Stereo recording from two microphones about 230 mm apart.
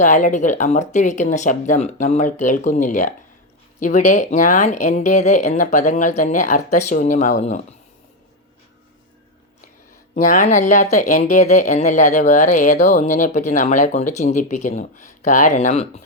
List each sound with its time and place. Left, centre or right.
0.0 s speech: left
10.2 s speech: left